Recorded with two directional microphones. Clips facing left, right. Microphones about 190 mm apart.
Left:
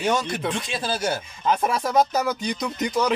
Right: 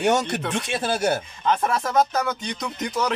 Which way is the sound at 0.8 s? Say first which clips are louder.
Right 3 dB; 60° right (ahead or behind).